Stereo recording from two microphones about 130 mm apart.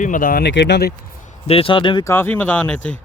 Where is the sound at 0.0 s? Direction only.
90° left.